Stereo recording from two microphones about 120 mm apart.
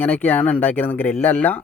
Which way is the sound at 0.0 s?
15° left (ahead or behind).